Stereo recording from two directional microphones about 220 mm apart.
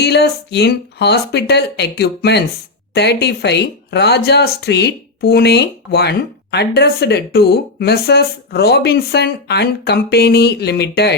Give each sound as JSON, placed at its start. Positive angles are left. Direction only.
{"t": 0.0, "sound": "speech", "side_deg": 50}